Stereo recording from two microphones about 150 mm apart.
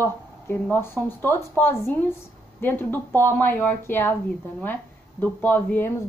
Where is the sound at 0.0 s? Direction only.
15° left (ahead or behind).